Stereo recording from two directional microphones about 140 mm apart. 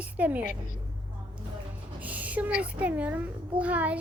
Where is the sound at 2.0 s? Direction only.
10° right (ahead or behind).